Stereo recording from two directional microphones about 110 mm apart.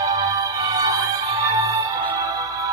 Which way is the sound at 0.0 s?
30° right (ahead or behind).